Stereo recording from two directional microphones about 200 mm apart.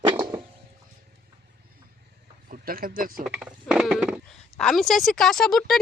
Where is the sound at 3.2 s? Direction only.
5° right (ahead or behind).